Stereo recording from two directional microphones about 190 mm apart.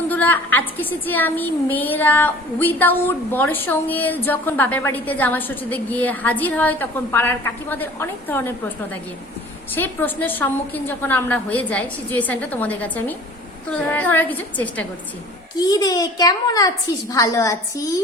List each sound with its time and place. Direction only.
0.1 s a woman's voice: 10° left (ahead or behind)
15.5 s a child's voice: 20° left (ahead or behind)